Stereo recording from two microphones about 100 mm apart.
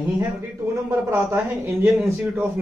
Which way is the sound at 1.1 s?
20° right (ahead or behind).